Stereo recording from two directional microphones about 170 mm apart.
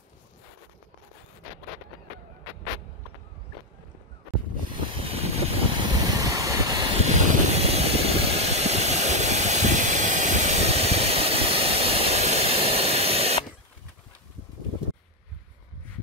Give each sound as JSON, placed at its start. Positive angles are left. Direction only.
{"t": 4.6, "sound": "vehicle", "side_deg": -30}
{"t": 6.0, "sound": "vehicle", "side_deg": -20}
{"t": 7.0, "sound": "vehicle", "side_deg": -40}